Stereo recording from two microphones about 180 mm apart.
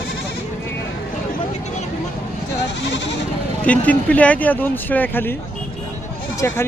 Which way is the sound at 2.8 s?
80° left.